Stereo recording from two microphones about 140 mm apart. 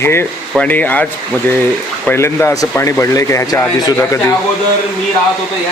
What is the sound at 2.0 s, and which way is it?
Speech, 15° left (ahead or behind).